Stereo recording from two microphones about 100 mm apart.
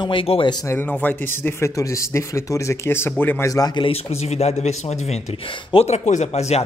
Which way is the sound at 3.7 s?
70° left (ahead or behind).